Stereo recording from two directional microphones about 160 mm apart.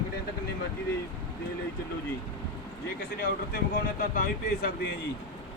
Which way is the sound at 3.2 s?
65° left (ahead or behind).